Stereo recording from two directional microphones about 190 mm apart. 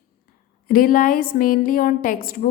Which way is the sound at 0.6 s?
50° left (ahead or behind).